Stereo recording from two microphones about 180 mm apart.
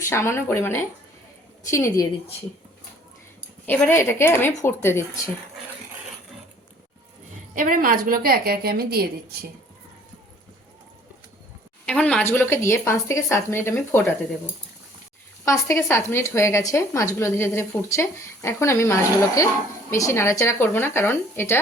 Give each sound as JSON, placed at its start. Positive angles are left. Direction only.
{"t": 0.0, "sound": "speech", "side_deg": 15}
{"t": 3.7, "sound": "speech", "side_deg": 10}
{"t": 7.5, "sound": "a woman's voice", "side_deg": -50}
{"t": 11.9, "sound": "speech", "side_deg": 5}
{"t": 15.4, "sound": "speech", "side_deg": 15}